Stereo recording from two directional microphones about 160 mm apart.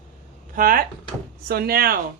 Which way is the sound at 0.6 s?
60° right (ahead or behind).